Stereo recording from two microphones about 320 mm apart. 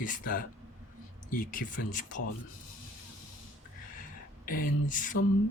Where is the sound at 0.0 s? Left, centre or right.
Left.